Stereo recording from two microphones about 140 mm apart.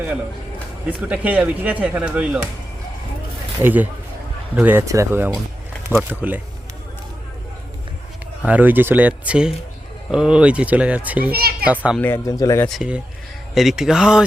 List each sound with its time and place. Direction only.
0.9 s speech: 10° right (ahead or behind)
3.6 s speech: 15° right (ahead or behind)
8.4 s speech: 10° right (ahead or behind)
11.3 s a child's voice: 90° right
11.6 s speech: 10° right (ahead or behind)
11.9 s speech: 15° left (ahead or behind)
12.6 s speech: centre (ahead or behind)